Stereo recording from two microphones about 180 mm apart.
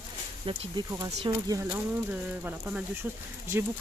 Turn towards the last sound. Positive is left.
turn(degrees=-15)  # may be behind; listen again after turning